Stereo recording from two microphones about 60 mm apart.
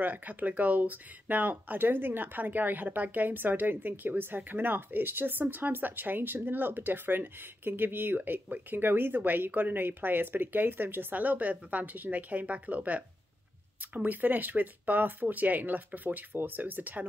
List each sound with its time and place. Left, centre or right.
0.0 s speech: right